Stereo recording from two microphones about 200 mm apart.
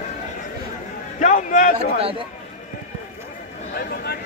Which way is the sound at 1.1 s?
40° left (ahead or behind).